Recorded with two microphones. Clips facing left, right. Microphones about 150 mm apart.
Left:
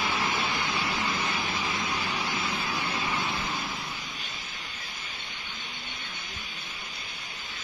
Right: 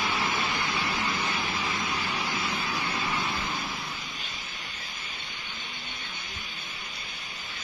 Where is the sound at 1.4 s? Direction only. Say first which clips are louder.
Even; 10° left (ahead or behind).